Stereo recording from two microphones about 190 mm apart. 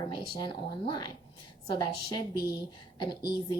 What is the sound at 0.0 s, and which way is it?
A woman's voice, 25° left (ahead or behind).